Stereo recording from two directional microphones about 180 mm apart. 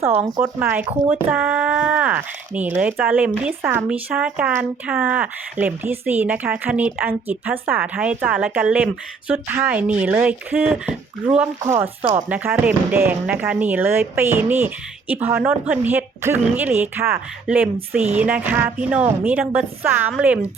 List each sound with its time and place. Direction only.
0.0 s speech: 15° right (ahead or behind)
11.6 s speech: 15° right (ahead or behind)